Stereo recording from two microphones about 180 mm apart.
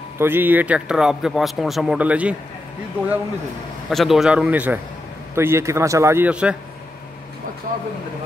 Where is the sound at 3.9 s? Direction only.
Centre (ahead or behind).